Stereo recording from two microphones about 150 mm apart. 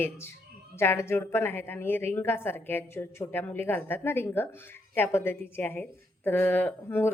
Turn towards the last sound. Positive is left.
turn(degrees=15)  # may be behind; listen again after turning